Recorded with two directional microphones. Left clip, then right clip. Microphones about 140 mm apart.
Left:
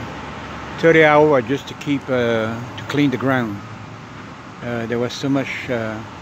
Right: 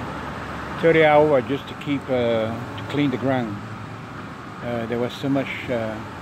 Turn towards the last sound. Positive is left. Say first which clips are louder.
# left 2 dB
turn(degrees=65)  # may be behind; listen again after turning